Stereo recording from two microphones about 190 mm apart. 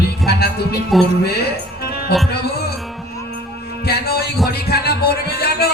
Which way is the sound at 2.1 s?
55° left (ahead or behind).